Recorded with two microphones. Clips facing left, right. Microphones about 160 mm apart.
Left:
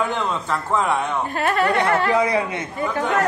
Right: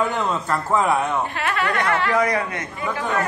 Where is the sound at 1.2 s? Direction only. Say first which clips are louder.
Left 4 dB; 40° left (ahead or behind).